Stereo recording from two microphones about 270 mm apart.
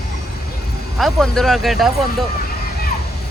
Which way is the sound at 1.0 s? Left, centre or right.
Centre.